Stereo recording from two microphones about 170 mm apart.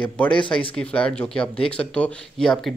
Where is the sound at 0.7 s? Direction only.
5° left (ahead or behind).